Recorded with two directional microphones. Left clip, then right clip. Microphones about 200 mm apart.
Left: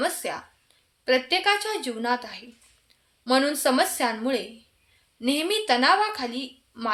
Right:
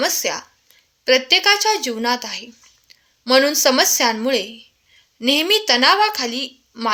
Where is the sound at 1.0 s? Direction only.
40° right (ahead or behind).